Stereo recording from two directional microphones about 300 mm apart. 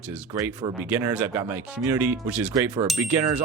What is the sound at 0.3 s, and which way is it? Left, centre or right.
Speech, centre.